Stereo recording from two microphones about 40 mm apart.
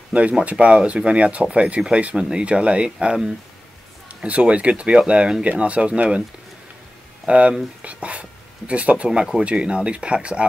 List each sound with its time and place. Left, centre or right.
0.1 s speech: right
4.1 s speech: right
7.2 s speech: right